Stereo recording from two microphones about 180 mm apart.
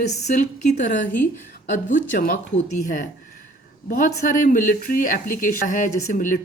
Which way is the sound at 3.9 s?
50° left (ahead or behind).